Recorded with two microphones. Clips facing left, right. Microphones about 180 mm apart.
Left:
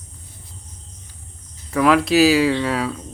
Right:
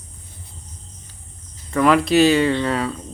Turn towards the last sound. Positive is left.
turn(degrees=0)  # may be behind; listen again after turning